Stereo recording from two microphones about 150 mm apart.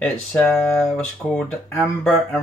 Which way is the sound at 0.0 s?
5° left (ahead or behind).